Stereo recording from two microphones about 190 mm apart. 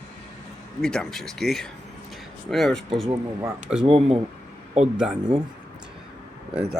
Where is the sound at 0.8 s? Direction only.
5° left (ahead or behind).